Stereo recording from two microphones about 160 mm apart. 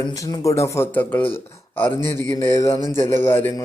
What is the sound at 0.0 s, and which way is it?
A man's voice, 20° left (ahead or behind).